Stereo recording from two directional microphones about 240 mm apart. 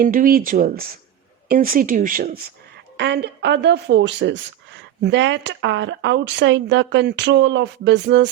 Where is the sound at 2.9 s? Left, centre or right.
Right.